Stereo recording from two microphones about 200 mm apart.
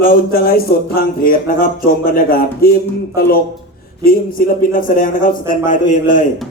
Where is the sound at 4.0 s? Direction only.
45° left (ahead or behind).